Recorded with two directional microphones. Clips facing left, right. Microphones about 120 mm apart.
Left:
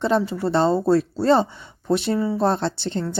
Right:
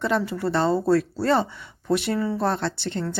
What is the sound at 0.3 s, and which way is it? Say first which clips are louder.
Speech: left 3 dB; 25° left (ahead or behind).